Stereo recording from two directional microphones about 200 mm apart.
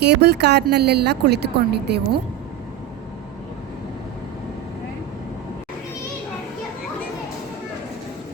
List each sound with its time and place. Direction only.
0.0 s speech: 55° right (ahead or behind)